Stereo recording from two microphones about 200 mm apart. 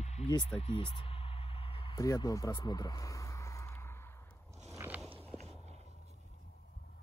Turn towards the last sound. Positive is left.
turn(degrees=-35)  # may be behind; listen again after turning